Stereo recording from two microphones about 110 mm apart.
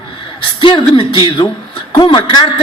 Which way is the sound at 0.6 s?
50° left (ahead or behind).